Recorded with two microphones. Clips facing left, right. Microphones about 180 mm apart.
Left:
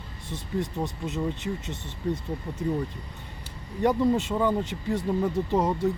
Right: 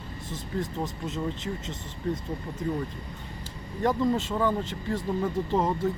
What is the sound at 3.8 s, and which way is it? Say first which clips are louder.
Speech: left 2 dB; 10° left (ahead or behind).